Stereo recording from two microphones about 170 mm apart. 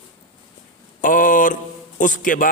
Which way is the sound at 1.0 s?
50° left (ahead or behind).